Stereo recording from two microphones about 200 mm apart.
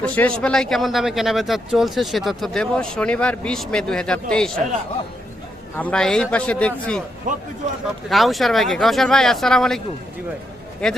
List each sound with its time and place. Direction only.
0.0 s speech: 5° left (ahead or behind)
5.7 s speech: 5° left (ahead or behind)
7.3 s a man's voice: 40° right (ahead or behind)
8.1 s speech: centre (ahead or behind)
10.8 s speech: 5° left (ahead or behind)